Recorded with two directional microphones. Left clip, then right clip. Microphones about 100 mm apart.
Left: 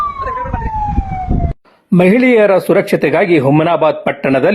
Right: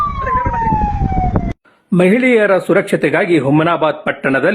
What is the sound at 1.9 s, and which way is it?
A man's voice, 30° left (ahead or behind).